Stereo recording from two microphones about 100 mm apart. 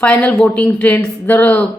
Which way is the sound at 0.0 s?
10° left (ahead or behind).